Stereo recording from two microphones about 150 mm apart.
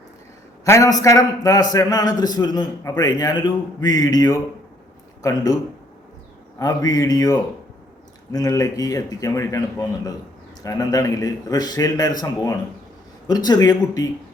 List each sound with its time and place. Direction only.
0.6 s a man's voice: 20° left (ahead or behind)
6.6 s a man's voice: 25° left (ahead or behind)